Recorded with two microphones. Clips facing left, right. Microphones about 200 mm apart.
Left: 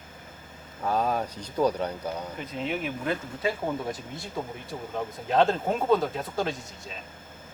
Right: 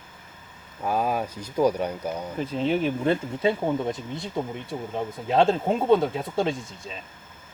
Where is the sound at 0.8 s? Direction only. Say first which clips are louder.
Right 1 dB; 10° right (ahead or behind).